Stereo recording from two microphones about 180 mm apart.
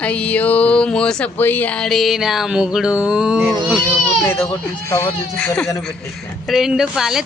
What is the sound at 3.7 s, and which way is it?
Speech, 5° left (ahead or behind).